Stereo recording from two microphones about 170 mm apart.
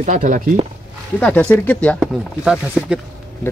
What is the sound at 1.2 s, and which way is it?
Speech, 10° left (ahead or behind).